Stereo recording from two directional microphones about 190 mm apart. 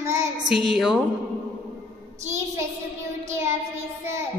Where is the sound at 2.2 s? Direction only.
15° right (ahead or behind).